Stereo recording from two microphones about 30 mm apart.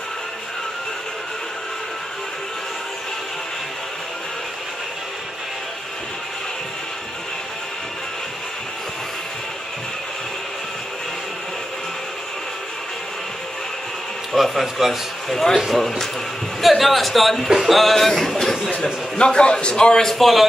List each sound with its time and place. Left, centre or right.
14.3 s a man's voice: centre
15.2 s speech: centre
16.6 s speech: centre
19.1 s a man's voice: left
20.2 s speech: centre